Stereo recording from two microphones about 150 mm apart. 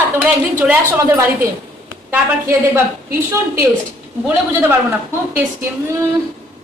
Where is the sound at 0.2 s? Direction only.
10° right (ahead or behind).